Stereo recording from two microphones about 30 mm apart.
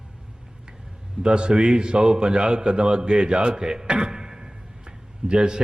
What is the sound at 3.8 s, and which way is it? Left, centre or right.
Speech, right.